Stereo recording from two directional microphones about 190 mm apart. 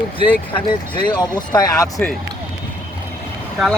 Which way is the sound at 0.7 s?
20° left (ahead or behind).